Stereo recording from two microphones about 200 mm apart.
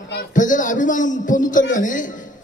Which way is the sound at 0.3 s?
40° left (ahead or behind).